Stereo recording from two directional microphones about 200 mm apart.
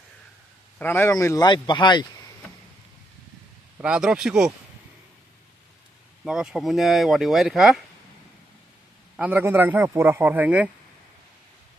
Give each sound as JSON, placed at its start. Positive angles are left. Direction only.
{"t": 0.7, "sound": "a man's voice", "side_deg": 10}
{"t": 3.7, "sound": "speech", "side_deg": -5}
{"t": 6.2, "sound": "speech", "side_deg": -5}
{"t": 9.1, "sound": "a man's voice", "side_deg": -10}